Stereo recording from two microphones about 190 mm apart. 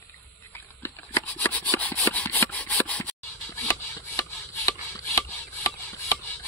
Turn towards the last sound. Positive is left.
turn(degrees=15)  # may be behind; listen again after turning